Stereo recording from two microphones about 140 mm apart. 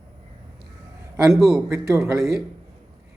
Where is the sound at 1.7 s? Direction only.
20° right (ahead or behind).